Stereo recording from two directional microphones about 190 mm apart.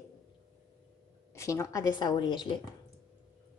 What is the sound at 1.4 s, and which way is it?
A woman's voice, 15° left (ahead or behind).